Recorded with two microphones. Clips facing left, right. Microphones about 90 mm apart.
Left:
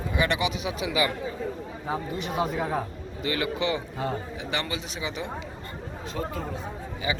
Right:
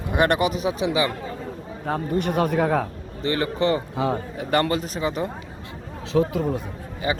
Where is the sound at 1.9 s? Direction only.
50° right (ahead or behind).